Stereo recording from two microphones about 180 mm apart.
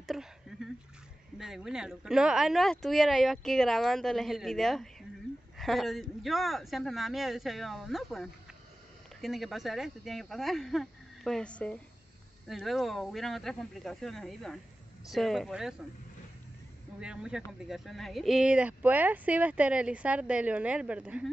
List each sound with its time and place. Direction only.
0.0 s a sound: centre (ahead or behind)
1.4 s speech: centre (ahead or behind)
17.0 s speech: 5° right (ahead or behind)